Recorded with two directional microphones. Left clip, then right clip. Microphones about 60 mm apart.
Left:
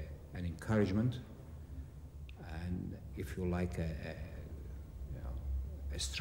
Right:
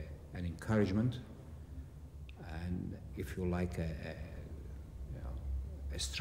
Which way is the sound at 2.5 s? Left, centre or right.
Right.